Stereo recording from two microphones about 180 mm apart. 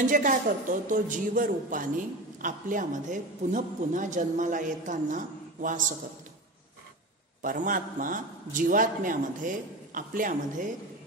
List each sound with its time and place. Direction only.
0.0 s a man's voice: 45° right (ahead or behind)
7.4 s a man's voice: 50° right (ahead or behind)